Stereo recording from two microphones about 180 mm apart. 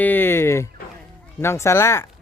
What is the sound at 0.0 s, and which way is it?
Fowl, 10° left (ahead or behind).